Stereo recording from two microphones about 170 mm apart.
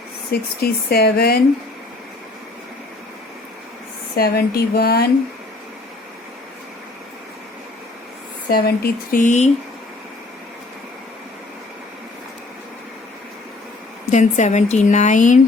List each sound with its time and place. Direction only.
0.3 s speech: 65° left (ahead or behind)
4.2 s speech: 65° left (ahead or behind)
8.4 s speech: 65° left (ahead or behind)
9.2 s speech: 45° left (ahead or behind)
14.1 s speech: 45° left (ahead or behind)